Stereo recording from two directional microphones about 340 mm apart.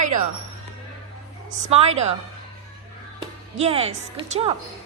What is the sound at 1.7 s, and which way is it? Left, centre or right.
Speech, centre.